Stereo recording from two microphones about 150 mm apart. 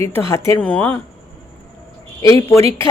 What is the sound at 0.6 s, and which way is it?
Speech, 10° left (ahead or behind).